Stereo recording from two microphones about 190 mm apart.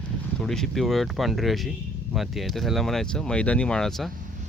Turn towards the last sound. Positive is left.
turn(degrees=0)  # may be behind; listen again after turning